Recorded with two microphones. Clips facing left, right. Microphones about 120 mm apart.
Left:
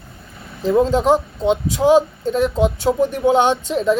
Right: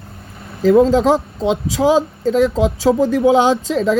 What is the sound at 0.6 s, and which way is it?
Speech, 90° right.